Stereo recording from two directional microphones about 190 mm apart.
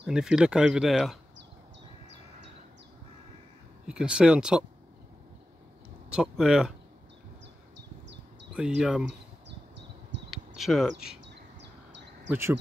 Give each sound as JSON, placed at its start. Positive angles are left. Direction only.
{"t": 0.0, "sound": "speech", "side_deg": -5}
{"t": 3.8, "sound": "speech", "side_deg": -5}
{"t": 6.0, "sound": "speech", "side_deg": -5}
{"t": 8.5, "sound": "speech", "side_deg": -5}
{"t": 9.0, "sound": "insect", "side_deg": -65}
{"t": 10.3, "sound": "speech", "side_deg": 0}
{"t": 11.2, "sound": "a sound", "side_deg": -65}
{"t": 12.3, "sound": "speech", "side_deg": -15}